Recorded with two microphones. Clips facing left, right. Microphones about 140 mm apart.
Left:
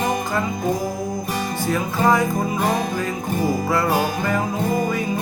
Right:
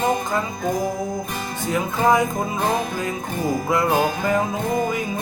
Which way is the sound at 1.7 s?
20° right (ahead or behind).